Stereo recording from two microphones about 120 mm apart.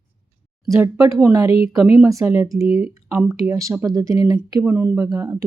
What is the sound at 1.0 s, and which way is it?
Speech, 25° right (ahead or behind).